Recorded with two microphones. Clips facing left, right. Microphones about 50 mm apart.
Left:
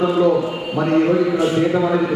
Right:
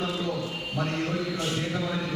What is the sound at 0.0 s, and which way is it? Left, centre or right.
Speech, left.